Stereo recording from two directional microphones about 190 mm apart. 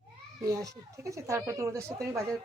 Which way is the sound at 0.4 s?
15° right (ahead or behind).